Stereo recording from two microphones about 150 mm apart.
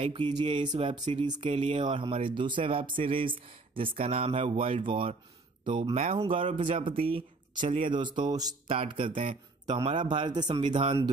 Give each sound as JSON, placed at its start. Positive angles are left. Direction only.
{"t": 0.0, "sound": "speech", "side_deg": -35}